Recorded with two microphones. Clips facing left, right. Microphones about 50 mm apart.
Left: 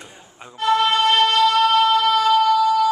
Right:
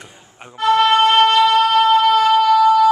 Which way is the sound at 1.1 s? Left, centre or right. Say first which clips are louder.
Right 4 dB; right.